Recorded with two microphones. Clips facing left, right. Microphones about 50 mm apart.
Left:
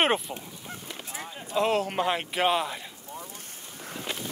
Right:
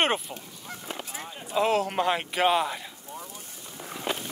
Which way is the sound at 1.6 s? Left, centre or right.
Centre.